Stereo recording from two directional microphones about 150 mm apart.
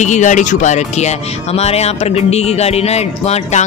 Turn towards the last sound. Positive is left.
turn(degrees=45)  # may be behind; listen again after turning